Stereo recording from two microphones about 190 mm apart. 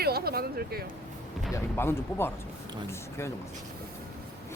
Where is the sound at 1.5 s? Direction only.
10° left (ahead or behind).